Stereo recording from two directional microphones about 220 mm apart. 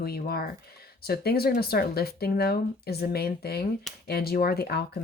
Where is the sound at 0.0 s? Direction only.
45° left (ahead or behind).